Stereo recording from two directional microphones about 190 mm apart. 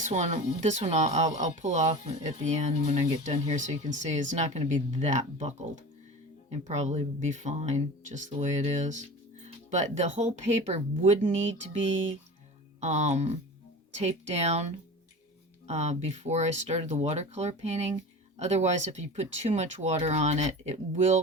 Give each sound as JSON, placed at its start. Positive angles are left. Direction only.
{"t": 0.0, "sound": "speech", "side_deg": -40}
{"t": 12.8, "sound": "speech", "side_deg": -35}